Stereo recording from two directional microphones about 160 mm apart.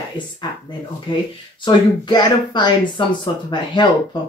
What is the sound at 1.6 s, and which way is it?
Speech, 25° left (ahead or behind).